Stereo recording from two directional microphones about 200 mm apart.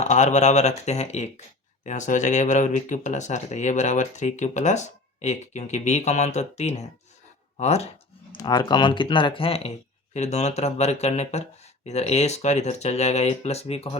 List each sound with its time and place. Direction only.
0.0 s speech: 35° left (ahead or behind)
7.5 s a sound: 30° left (ahead or behind)
8.4 s speech: 20° left (ahead or behind)